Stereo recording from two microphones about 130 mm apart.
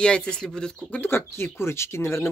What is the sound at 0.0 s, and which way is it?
Speech, 5° left (ahead or behind).